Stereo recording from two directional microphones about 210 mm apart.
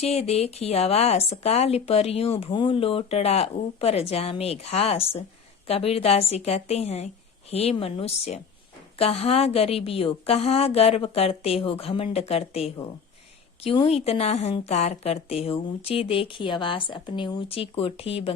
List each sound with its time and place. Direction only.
0.0 s speech: 30° left (ahead or behind)